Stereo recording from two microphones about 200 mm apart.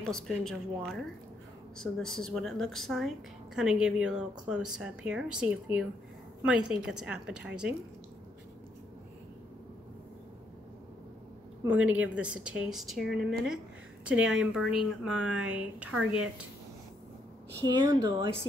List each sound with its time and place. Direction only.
0.0 s a woman's voice: 5° left (ahead or behind)
11.6 s a woman's voice: 5° right (ahead or behind)
17.6 s speech: 20° right (ahead or behind)